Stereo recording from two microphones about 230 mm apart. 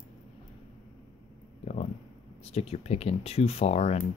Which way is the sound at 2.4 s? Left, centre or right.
Left.